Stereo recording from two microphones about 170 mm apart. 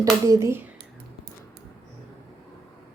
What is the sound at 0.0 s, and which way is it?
Speech, 20° right (ahead or behind).